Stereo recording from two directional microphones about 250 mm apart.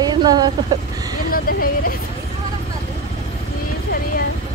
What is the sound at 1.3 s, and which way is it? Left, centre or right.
Speech, left.